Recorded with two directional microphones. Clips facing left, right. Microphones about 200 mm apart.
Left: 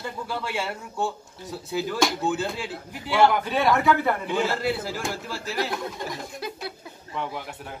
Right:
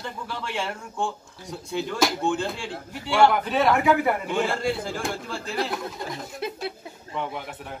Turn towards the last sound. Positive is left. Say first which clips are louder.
# right 1 dB
turn(degrees=0)  # may be behind; listen again after turning